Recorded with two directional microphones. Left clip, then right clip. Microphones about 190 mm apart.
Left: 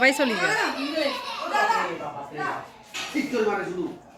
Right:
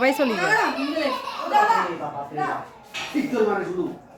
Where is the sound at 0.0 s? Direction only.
5° right (ahead or behind).